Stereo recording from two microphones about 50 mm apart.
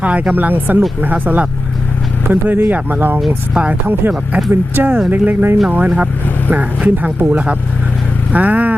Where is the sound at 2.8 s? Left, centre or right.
Right.